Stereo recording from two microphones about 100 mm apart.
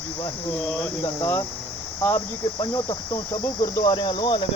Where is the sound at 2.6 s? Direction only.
50° left (ahead or behind).